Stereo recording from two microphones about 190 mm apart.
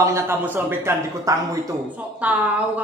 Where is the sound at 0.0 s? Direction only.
15° right (ahead or behind).